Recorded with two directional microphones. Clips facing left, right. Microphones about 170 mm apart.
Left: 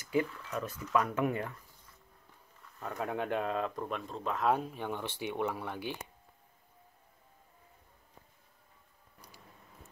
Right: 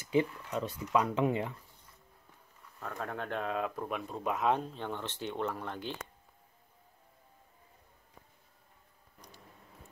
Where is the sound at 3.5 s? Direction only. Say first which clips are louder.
Even; 5° right (ahead or behind).